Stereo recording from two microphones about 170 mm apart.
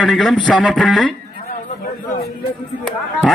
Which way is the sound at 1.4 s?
60° left (ahead or behind).